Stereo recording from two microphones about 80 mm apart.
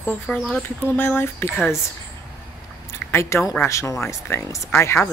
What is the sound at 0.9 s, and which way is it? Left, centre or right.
Speech, left.